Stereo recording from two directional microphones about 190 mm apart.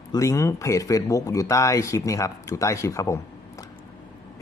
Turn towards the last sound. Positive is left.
turn(degrees=15)  # may be behind; listen again after turning